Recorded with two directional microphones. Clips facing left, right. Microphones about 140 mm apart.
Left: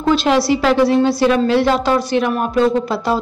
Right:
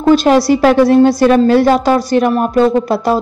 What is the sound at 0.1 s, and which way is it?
A woman's voice, 45° right (ahead or behind).